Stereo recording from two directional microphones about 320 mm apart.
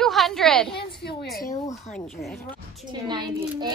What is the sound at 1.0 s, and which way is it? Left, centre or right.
Speech, left.